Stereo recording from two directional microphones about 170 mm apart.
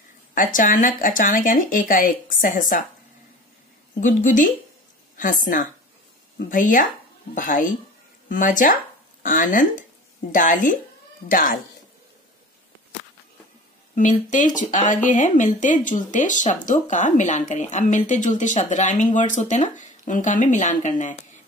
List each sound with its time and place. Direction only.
0.3 s speech: 50° left (ahead or behind)
4.0 s a woman's voice: 50° left (ahead or behind)
13.9 s speech: 50° left (ahead or behind)